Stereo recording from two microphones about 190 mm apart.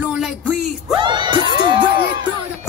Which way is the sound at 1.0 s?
25° right (ahead or behind).